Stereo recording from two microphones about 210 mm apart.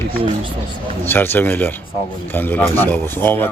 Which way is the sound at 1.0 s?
10° left (ahead or behind).